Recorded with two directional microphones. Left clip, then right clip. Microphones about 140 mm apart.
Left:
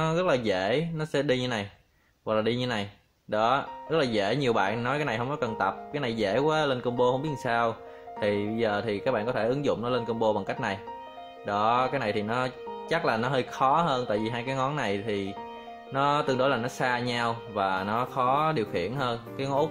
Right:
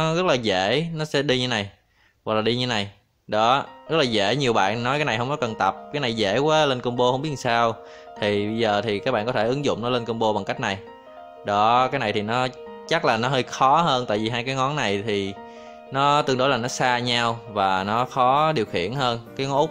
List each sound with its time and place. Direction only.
0.0 s speech: 25° right (ahead or behind)